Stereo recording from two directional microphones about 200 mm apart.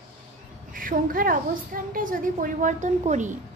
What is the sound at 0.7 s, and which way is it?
A woman's voice, 45° right (ahead or behind).